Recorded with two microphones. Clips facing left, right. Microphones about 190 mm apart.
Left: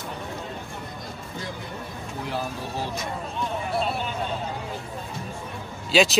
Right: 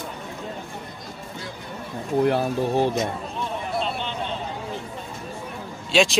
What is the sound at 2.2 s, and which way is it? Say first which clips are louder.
Speech: right 11 dB; 60° right (ahead or behind).